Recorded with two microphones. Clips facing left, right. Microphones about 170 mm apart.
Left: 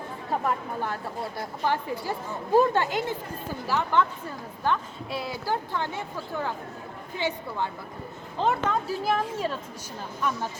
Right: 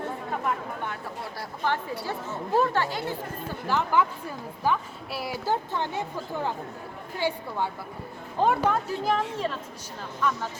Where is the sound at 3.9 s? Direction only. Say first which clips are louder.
Even; 10° right (ahead or behind).